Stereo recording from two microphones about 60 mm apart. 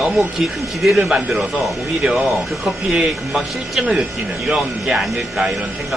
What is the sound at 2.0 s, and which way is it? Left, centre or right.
Speech, centre.